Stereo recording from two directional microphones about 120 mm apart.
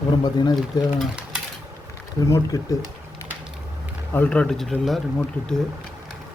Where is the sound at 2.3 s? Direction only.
30° left (ahead or behind).